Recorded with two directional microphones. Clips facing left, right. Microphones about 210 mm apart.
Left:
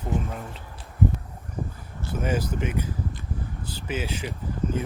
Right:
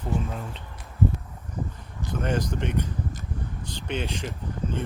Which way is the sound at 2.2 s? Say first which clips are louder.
Left 1 dB; 5° left (ahead or behind).